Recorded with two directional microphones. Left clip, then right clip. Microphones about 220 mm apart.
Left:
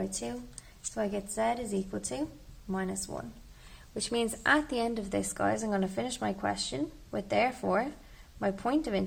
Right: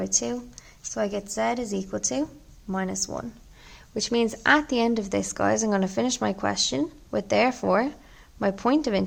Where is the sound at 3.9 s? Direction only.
20° right (ahead or behind).